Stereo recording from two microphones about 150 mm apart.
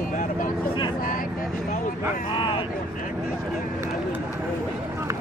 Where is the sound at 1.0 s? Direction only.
65° left (ahead or behind).